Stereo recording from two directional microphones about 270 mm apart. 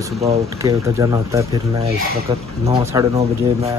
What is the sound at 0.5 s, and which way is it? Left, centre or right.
Speech, centre.